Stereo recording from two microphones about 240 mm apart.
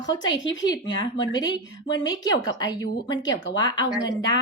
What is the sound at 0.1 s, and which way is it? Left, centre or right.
A woman's voice, centre.